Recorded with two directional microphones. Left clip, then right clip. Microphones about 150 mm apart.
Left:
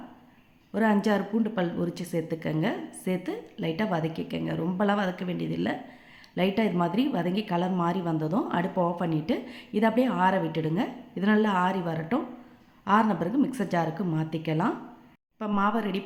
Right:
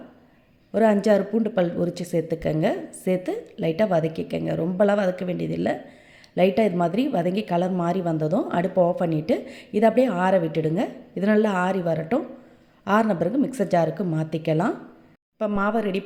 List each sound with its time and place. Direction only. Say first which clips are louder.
0.7 s a woman's voice: right 7 dB; 25° right (ahead or behind)